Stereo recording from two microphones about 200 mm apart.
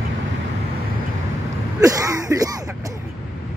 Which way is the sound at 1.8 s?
15° right (ahead or behind).